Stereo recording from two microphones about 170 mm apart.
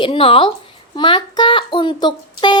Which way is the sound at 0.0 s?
30° left (ahead or behind).